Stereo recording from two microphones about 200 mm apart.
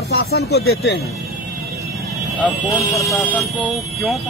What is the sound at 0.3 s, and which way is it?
Speech, 55° left (ahead or behind).